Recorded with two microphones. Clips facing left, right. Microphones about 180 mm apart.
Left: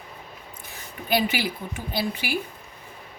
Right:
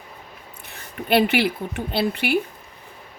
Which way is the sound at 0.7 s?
65° right (ahead or behind).